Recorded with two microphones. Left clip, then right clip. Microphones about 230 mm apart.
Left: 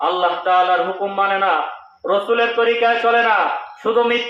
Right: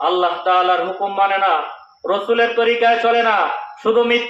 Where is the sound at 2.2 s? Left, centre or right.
Right.